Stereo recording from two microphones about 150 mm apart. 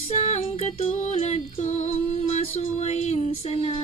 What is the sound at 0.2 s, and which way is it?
Music, 45° left (ahead or behind).